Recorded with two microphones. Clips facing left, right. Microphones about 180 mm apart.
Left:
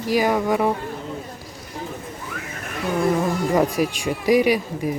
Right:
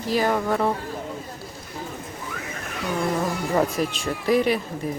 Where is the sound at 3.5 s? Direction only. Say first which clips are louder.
Left 2 dB; 15° left (ahead or behind).